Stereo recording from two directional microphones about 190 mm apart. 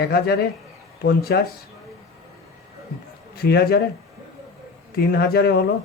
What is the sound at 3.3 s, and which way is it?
Speech, 55° left (ahead or behind).